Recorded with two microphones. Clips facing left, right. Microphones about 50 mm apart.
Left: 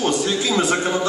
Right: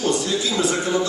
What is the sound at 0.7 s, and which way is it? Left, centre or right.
Speech, left.